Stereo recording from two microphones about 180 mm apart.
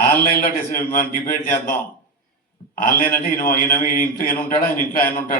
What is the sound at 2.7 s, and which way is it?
A man's voice, 50° left (ahead or behind).